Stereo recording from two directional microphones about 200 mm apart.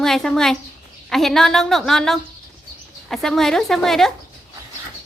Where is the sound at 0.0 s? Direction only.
Centre (ahead or behind).